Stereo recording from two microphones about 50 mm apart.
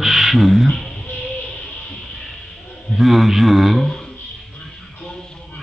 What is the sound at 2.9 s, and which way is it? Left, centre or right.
Speech, centre.